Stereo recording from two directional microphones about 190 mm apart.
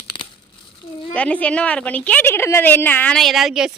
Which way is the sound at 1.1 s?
5° left (ahead or behind).